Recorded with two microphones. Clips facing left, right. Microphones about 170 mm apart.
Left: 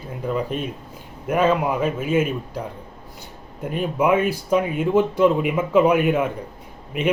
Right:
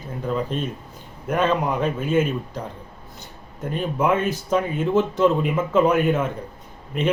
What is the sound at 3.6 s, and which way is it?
Speech, 10° left (ahead or behind).